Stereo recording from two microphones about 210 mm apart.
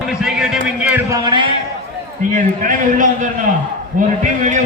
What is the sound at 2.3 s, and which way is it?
A man's voice, 40° right (ahead or behind).